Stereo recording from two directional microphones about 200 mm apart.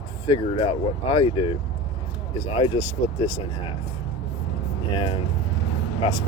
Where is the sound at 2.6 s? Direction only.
25° left (ahead or behind).